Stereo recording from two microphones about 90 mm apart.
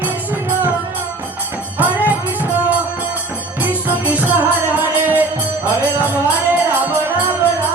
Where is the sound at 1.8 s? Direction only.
15° right (ahead or behind).